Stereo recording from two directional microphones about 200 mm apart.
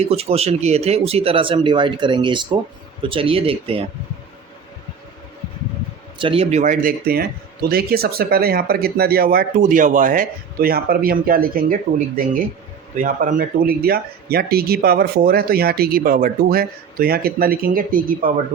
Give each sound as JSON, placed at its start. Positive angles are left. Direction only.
{"t": 0.0, "sound": "speech", "side_deg": -30}
{"t": 6.1, "sound": "speech", "side_deg": -25}